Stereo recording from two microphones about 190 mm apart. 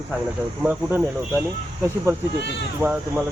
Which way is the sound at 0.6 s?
10° right (ahead or behind).